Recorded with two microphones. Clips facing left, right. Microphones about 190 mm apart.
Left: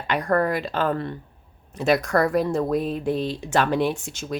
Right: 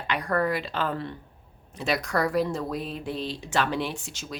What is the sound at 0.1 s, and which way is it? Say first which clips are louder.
Speech: left 4 dB; 45° left (ahead or behind).